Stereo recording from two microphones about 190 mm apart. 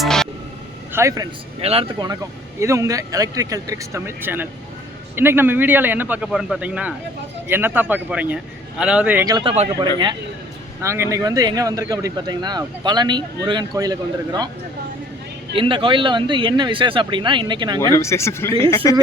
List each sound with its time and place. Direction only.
0.0 s music: 5° left (ahead or behind)
0.9 s speech: 15° right (ahead or behind)
1.6 s speech: 30° right (ahead or behind)
2.6 s speech: 15° right (ahead or behind)
9.2 s speech: 25° right (ahead or behind)
15.5 s speech: 25° right (ahead or behind)
17.9 s speech: 15° left (ahead or behind)